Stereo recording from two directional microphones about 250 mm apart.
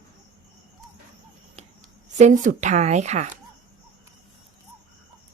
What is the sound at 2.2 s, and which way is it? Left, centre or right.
Speech, right.